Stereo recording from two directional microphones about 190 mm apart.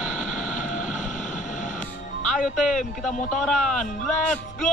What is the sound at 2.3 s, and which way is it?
Speech, 40° left (ahead or behind).